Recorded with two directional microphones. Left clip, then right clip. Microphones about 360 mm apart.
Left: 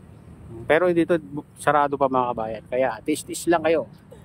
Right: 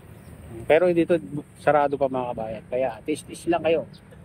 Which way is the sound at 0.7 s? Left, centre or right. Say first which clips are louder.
Even; centre.